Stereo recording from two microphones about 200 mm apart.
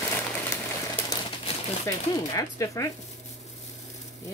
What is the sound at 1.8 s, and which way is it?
Speech, 15° left (ahead or behind).